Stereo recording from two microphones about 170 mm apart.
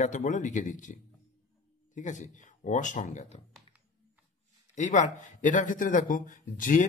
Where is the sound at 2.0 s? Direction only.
45° left (ahead or behind).